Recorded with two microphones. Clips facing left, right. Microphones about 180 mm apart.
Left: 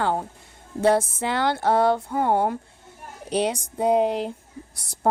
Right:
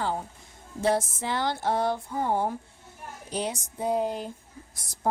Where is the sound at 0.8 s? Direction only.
65° left (ahead or behind).